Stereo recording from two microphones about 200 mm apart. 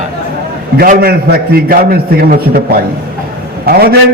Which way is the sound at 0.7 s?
45° right (ahead or behind).